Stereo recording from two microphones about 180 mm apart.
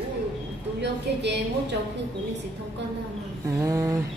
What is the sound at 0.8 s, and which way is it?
Speech, 70° right (ahead or behind).